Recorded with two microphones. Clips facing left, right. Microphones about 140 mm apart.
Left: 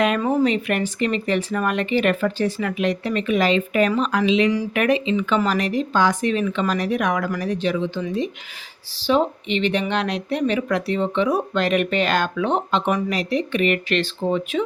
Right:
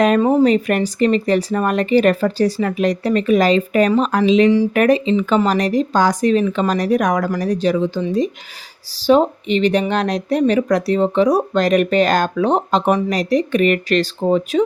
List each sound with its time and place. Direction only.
0.2 s speech: 30° right (ahead or behind)